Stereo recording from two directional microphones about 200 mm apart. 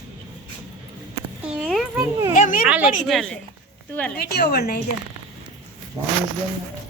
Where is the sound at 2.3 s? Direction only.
40° left (ahead or behind).